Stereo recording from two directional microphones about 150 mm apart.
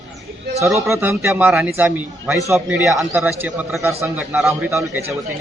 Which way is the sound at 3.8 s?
15° right (ahead or behind).